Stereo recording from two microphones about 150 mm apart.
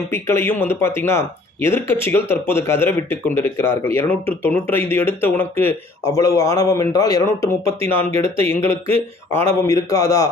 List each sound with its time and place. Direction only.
0.1 s a man's voice: 15° left (ahead or behind)
7.7 s speech: 40° right (ahead or behind)
9.6 s a man's voice: 20° left (ahead or behind)